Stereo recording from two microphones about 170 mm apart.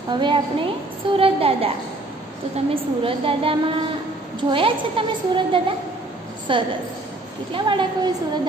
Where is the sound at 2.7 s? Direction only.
30° right (ahead or behind).